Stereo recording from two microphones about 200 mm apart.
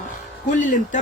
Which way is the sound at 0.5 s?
40° left (ahead or behind).